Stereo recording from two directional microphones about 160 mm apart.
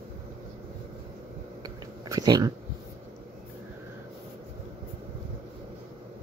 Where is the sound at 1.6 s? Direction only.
20° right (ahead or behind).